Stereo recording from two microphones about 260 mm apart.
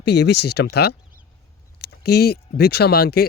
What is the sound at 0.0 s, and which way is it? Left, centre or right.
Speech, left.